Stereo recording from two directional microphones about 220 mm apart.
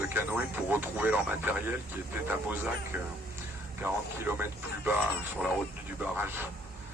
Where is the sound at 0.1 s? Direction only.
10° right (ahead or behind).